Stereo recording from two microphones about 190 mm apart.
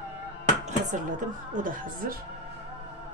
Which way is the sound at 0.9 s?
40° right (ahead or behind).